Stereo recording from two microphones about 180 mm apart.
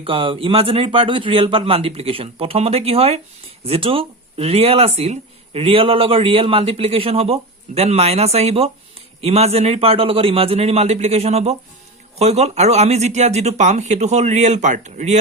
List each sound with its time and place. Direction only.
0.0 s speech: 30° right (ahead or behind)